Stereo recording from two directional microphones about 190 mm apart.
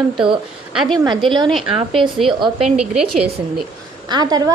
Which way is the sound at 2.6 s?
5° right (ahead or behind).